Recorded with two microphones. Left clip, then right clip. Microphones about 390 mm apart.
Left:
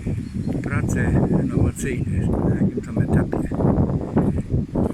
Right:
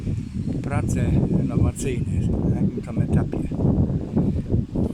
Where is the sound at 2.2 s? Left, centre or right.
Left.